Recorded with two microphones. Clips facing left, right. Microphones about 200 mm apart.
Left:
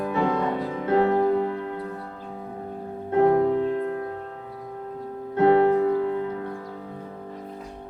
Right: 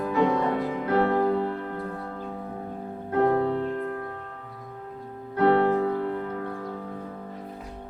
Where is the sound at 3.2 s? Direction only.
15° left (ahead or behind).